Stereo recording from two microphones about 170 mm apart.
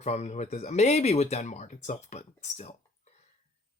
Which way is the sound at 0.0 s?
40° left (ahead or behind).